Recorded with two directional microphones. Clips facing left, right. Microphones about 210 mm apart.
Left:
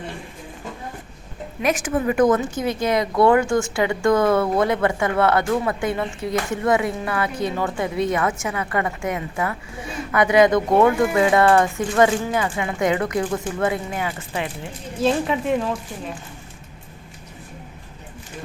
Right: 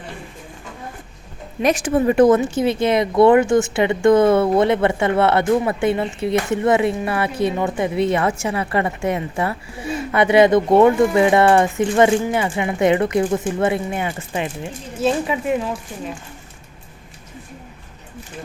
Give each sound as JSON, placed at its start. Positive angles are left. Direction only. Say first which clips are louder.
{"t": 1.6, "sound": "speech", "louder": "right 4 dB", "side_deg": -30}
{"t": 15.0, "sound": "speech", "louder": "right 1 dB", "side_deg": -5}